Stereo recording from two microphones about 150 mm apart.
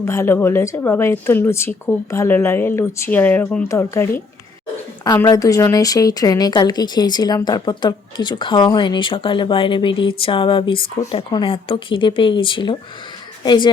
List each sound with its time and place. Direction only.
0.0 s a woman's voice: 20° left (ahead or behind)